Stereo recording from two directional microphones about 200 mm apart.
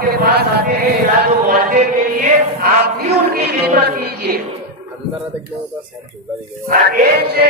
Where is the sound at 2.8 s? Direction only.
55° right (ahead or behind).